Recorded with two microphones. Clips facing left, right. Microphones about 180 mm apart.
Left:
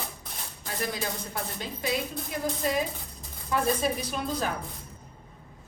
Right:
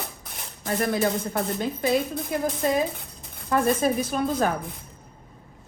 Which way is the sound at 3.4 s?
50° right (ahead or behind).